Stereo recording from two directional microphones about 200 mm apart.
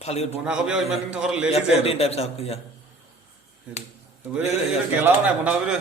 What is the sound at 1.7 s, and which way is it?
Speech, 30° left (ahead or behind).